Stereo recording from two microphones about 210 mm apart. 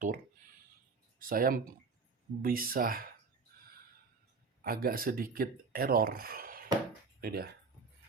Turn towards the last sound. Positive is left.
turn(degrees=-45)  # may be behind; listen again after turning